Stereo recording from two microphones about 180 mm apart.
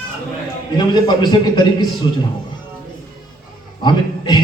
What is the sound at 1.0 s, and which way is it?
Speech, 25° left (ahead or behind).